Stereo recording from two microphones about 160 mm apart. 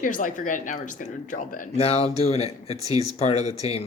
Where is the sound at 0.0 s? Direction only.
55° left (ahead or behind).